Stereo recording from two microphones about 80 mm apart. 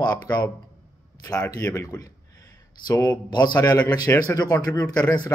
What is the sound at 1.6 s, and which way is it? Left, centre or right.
Speech, left.